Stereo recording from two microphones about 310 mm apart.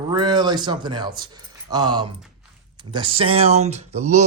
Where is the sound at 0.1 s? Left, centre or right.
Centre.